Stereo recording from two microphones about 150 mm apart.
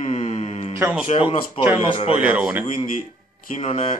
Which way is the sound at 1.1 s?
35° left (ahead or behind).